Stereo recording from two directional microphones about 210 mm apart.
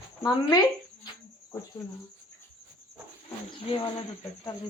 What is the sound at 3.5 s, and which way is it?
Speech, 25° left (ahead or behind).